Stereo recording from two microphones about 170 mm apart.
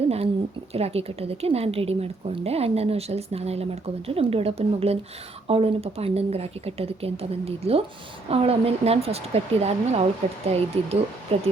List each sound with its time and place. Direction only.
0.7 s a woman's voice: 35° right (ahead or behind)